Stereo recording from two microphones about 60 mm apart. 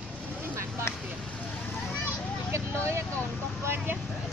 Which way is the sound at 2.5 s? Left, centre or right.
Right.